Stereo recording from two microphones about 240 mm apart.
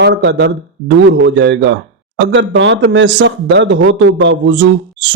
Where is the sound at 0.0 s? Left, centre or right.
Right.